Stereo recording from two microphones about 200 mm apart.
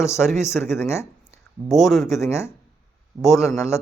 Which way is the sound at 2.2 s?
15° left (ahead or behind).